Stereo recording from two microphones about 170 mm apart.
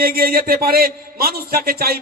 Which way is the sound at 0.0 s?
60° right (ahead or behind).